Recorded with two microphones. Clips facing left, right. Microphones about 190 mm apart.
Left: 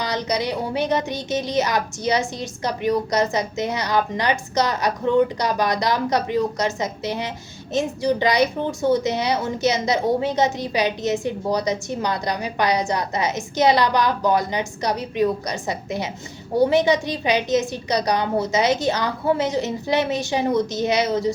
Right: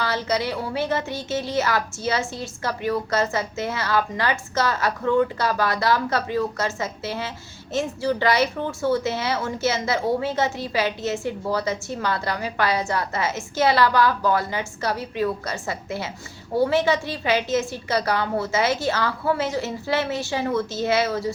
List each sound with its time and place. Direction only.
0.0 s a woman's voice: 15° left (ahead or behind)